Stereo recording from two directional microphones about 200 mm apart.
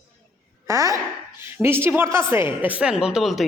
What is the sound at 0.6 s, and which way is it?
A woman's voice, 15° right (ahead or behind).